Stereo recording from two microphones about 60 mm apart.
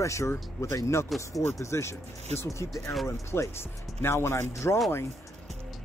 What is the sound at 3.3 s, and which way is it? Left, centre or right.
Speech, left.